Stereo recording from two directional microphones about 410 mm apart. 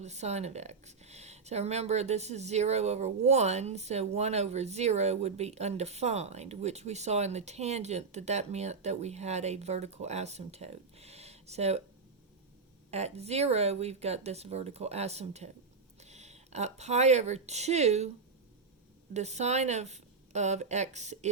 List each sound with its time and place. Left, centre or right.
0.0 s speech: centre
12.9 s speech: centre
19.1 s speech: centre